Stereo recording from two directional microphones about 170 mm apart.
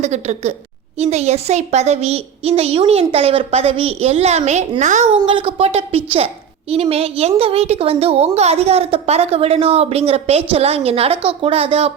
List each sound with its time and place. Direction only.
0.0 s a woman's voice: 40° right (ahead or behind)
5.2 s a woman's voice: 30° right (ahead or behind)